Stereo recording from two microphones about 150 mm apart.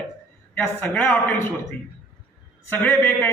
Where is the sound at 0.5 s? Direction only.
10° left (ahead or behind).